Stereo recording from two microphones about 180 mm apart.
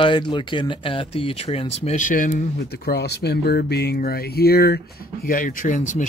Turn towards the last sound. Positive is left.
turn(degrees=45)  # may be behind; listen again after turning